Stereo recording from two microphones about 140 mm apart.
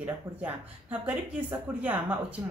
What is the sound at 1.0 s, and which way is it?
Speech, 15° right (ahead or behind).